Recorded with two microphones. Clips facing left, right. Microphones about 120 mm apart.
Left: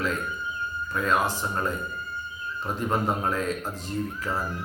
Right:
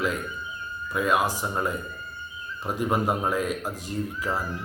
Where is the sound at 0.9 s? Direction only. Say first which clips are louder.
Right 1 dB; 10° right (ahead or behind).